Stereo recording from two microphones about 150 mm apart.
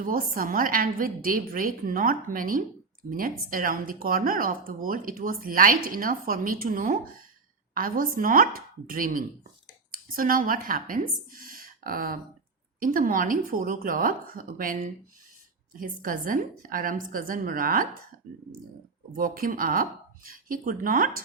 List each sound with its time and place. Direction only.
0.0 s a woman's voice: 70° right (ahead or behind)
11.3 s a sound: 70° right (ahead or behind)
12.8 s speech: 65° right (ahead or behind)
19.1 s speech: 70° right (ahead or behind)